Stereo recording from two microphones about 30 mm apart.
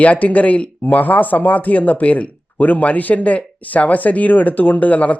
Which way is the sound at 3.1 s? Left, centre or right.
Left.